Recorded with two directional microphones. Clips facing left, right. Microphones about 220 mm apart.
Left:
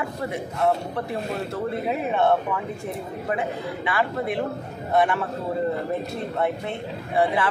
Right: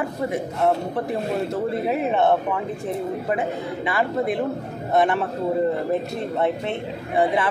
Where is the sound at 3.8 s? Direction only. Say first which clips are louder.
Right 3 dB; 25° right (ahead or behind).